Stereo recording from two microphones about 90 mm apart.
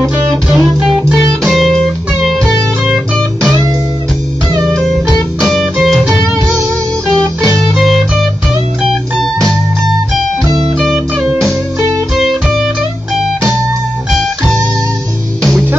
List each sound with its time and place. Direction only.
0.5 s guitar: 5° right (ahead or behind)
1.1 s music: centre (ahead or behind)
4.6 s music: centre (ahead or behind)
7.4 s music: centre (ahead or behind)
10.8 s music: centre (ahead or behind)